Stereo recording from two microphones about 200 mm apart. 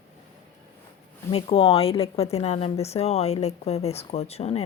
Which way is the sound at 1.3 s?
30° left (ahead or behind).